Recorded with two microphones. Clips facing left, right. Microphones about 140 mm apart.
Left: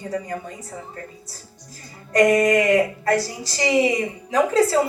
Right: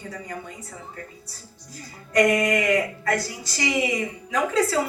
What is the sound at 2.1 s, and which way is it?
A woman's voice, 35° left (ahead or behind).